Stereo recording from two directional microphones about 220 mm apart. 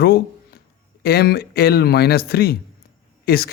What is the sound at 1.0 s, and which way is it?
A man's voice, 45° left (ahead or behind).